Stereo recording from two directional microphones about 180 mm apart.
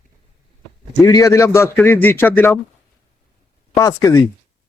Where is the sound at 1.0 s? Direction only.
15° left (ahead or behind).